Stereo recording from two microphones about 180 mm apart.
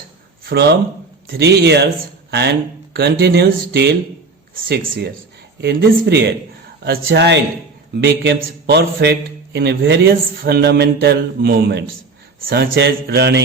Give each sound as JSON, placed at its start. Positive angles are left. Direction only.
{"t": 0.4, "sound": "a man's voice", "side_deg": -65}